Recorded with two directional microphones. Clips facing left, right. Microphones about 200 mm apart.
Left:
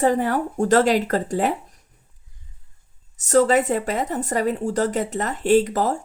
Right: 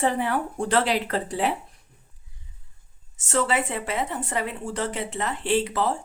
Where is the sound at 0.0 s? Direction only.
40° left (ahead or behind).